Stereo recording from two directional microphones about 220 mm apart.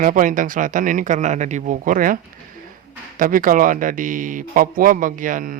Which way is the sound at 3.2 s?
40° right (ahead or behind).